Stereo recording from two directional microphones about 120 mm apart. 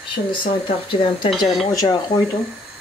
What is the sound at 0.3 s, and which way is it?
Speech, 45° left (ahead or behind).